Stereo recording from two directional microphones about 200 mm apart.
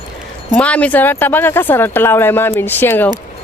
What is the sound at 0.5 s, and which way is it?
Speech, 5° left (ahead or behind).